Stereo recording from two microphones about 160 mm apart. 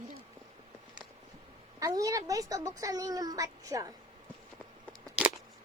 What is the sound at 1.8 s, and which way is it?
A child's voice, 20° right (ahead or behind).